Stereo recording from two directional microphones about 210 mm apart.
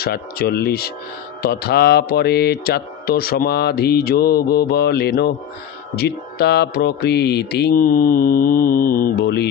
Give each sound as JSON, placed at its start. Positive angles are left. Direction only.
{"t": 0.0, "sound": "speech", "side_deg": 50}